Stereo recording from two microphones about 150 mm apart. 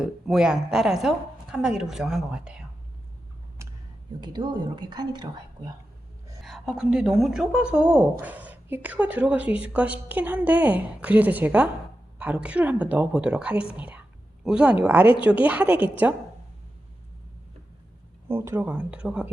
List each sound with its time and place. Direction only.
0.0 s a woman's voice: 5° right (ahead or behind)
3.6 s a sound: 20° right (ahead or behind)
4.2 s a woman's voice: 30° right (ahead or behind)
6.4 s a woman's voice: centre (ahead or behind)
18.3 s a woman's voice: 15° right (ahead or behind)